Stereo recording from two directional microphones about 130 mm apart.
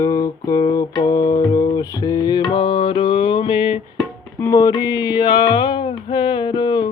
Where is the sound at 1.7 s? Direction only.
30° left (ahead or behind).